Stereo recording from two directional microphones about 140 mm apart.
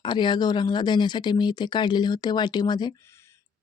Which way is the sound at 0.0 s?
35° left (ahead or behind).